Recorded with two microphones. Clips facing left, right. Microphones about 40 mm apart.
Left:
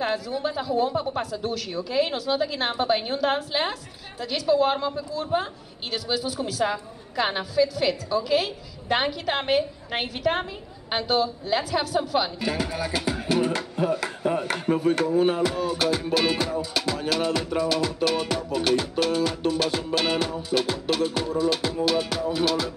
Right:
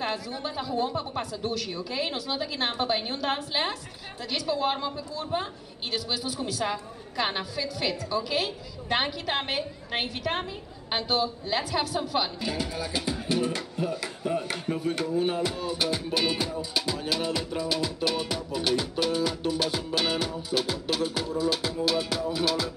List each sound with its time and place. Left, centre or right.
0.0 s a woman's voice: centre
12.4 s speech: left
16.7 s music: centre
17.6 s a woman's voice: centre